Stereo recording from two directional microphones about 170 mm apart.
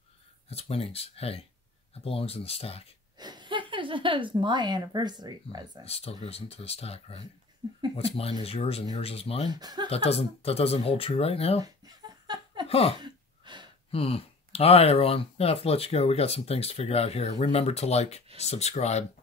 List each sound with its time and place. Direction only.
0.5 s speech: 35° left (ahead or behind)
3.2 s speech: 25° right (ahead or behind)
5.9 s speech: 35° left (ahead or behind)
9.5 s speech: 25° right (ahead or behind)
9.8 s speech: 35° left (ahead or behind)
11.6 s a sound: 25° right (ahead or behind)
12.6 s a sound: 35° left (ahead or behind)
13.0 s gasp: 25° right (ahead or behind)
13.9 s speech: 35° left (ahead or behind)